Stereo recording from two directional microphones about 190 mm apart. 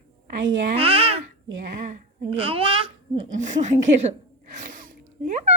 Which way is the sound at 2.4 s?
30° right (ahead or behind).